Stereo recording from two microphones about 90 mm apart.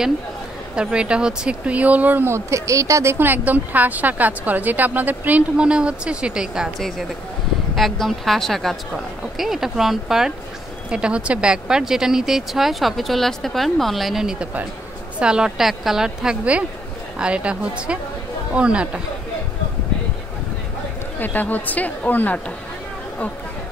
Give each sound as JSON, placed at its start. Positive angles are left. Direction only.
{"t": 0.7, "sound": "speech", "side_deg": -10}
{"t": 7.7, "sound": "speech", "side_deg": 0}
{"t": 21.2, "sound": "speech", "side_deg": 20}